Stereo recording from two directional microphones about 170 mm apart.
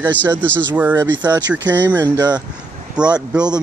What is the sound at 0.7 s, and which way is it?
Speech, 10° right (ahead or behind).